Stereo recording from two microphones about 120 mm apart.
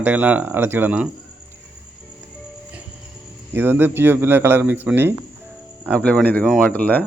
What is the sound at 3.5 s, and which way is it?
Speech, 20° right (ahead or behind).